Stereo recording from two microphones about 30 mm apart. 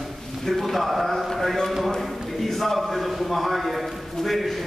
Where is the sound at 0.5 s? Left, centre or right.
Centre.